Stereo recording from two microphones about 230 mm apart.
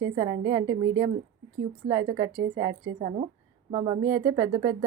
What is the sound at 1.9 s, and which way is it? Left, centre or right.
Speech, centre.